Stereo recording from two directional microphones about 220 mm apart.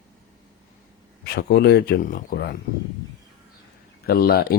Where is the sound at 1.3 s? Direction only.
45° left (ahead or behind).